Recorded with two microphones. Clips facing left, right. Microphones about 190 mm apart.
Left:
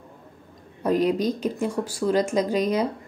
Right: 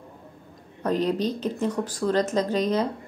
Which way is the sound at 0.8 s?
10° left (ahead or behind).